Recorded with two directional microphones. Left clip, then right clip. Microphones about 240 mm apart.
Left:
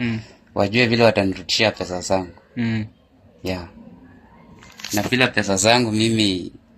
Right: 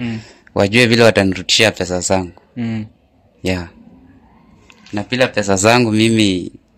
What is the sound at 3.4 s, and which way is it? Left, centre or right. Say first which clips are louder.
Speech: right 7 dB; right.